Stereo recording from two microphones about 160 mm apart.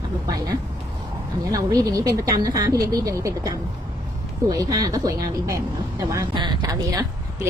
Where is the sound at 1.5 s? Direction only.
20° right (ahead or behind).